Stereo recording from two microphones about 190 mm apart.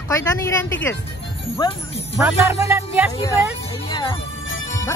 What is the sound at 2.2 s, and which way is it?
Speech, 10° right (ahead or behind).